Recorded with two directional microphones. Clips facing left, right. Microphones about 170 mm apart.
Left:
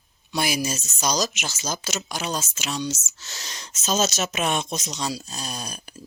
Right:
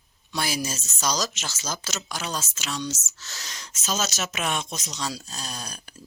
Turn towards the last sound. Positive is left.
turn(degrees=15)  # may be behind; listen again after turning